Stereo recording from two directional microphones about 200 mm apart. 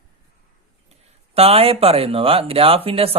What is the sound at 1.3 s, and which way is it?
Speech, 30° right (ahead or behind).